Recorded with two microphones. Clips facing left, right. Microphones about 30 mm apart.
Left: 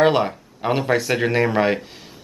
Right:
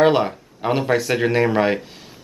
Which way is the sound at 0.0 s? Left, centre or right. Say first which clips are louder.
Right 1 dB; centre.